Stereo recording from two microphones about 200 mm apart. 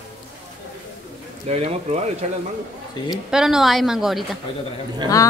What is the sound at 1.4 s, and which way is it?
Speech, 30° right (ahead or behind).